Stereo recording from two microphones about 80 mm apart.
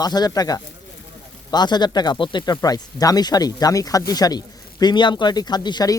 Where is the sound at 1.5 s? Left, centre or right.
Left.